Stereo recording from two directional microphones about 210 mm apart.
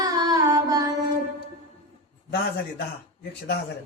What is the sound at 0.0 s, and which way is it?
Music, 20° right (ahead or behind).